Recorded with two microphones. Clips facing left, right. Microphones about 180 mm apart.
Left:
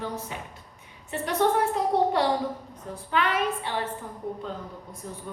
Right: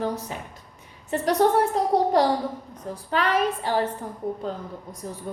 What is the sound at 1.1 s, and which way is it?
A woman's voice, 40° right (ahead or behind).